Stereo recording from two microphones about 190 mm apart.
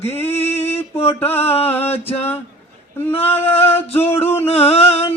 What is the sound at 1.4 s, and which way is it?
Mantra, 30° left (ahead or behind).